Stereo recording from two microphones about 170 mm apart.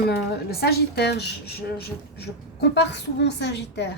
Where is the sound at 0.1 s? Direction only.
70° left (ahead or behind).